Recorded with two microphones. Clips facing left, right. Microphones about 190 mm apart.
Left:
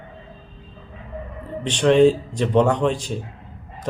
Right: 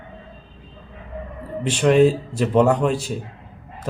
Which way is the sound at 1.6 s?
5° right (ahead or behind).